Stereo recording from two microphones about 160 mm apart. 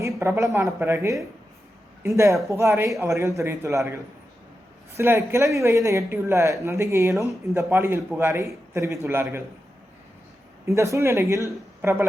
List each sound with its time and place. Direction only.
0.2 s a woman's voice: 15° right (ahead or behind)
10.7 s a woman's voice: 20° right (ahead or behind)